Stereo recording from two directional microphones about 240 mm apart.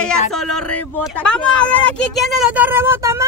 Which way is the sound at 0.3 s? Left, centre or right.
Centre.